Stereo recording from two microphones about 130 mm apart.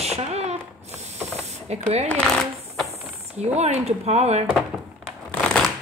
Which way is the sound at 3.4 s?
55° right (ahead or behind).